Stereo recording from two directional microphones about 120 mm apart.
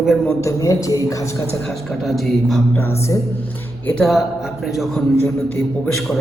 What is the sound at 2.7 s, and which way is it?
Speech, 20° left (ahead or behind).